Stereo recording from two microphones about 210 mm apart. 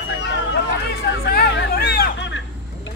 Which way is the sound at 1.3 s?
45° left (ahead or behind).